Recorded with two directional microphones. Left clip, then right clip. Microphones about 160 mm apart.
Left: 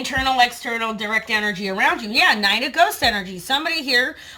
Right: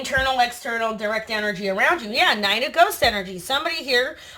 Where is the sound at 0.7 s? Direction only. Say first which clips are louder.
Left 1 dB; 10° right (ahead or behind).